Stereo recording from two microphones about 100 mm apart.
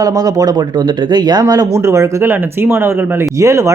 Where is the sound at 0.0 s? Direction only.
40° right (ahead or behind).